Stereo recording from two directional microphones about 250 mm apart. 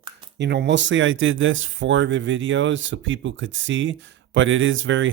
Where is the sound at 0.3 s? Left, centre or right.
Right.